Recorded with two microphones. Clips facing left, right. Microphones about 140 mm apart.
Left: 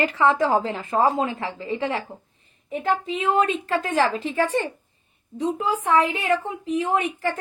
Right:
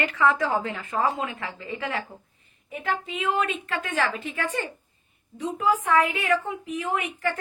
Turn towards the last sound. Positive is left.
turn(degrees=30)  # may be behind; listen again after turning